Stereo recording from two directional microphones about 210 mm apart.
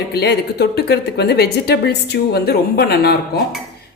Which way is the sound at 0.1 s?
50° left (ahead or behind).